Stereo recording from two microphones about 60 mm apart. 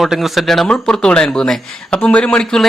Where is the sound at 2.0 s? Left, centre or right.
Left.